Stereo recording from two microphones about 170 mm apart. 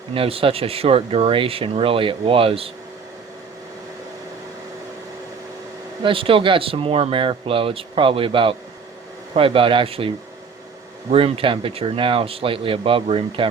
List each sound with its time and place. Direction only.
0.1 s speech: 35° right (ahead or behind)
6.0 s speech: 30° right (ahead or behind)
11.1 s speech: 30° right (ahead or behind)